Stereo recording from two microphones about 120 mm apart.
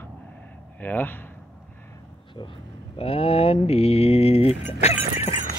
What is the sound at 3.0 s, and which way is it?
Mantra, 55° left (ahead or behind).